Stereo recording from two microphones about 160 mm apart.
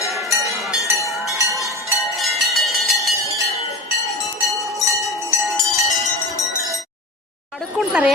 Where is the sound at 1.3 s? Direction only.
20° right (ahead or behind).